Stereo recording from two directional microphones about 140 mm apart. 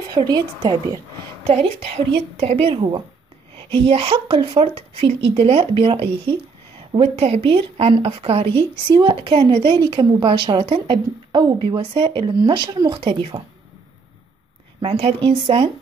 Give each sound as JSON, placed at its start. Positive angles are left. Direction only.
{"t": 0.1, "sound": "a woman's voice", "side_deg": -30}
{"t": 1.4, "sound": "a woman's voice", "side_deg": -45}
{"t": 14.8, "sound": "a woman's voice", "side_deg": -45}